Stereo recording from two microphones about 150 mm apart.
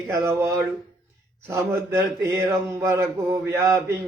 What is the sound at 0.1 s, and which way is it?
Speech, 20° right (ahead or behind).